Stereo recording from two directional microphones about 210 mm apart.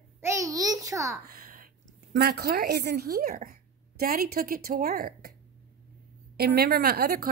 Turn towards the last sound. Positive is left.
turn(degrees=-45)  # may be behind; listen again after turning